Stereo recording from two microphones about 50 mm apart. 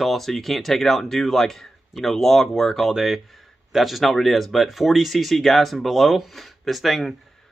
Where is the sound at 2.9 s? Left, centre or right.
Centre.